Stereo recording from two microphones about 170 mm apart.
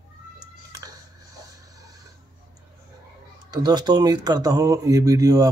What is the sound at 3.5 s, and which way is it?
Speech, 25° right (ahead or behind).